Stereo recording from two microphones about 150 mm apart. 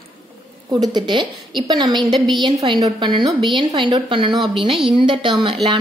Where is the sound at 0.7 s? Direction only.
25° right (ahead or behind).